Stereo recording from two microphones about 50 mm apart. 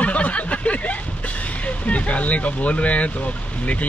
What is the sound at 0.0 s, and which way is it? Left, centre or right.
Speech, left.